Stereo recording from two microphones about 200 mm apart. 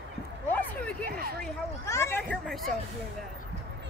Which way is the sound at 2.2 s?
Centre (ahead or behind).